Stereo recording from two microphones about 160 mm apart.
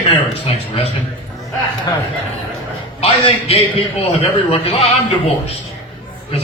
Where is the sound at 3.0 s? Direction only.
40° left (ahead or behind).